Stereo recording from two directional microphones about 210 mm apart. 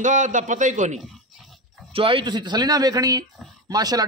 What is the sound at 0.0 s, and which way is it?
A man's voice, 35° right (ahead or behind).